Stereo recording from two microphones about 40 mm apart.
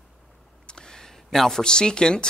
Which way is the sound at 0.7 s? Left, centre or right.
Centre.